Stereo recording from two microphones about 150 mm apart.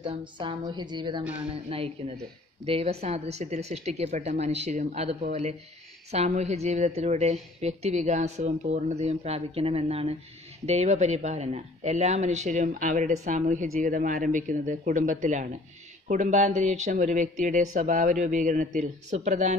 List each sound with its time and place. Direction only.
0.0 s a woman's voice: 35° right (ahead or behind); by 19.5 s 50° right (ahead or behind)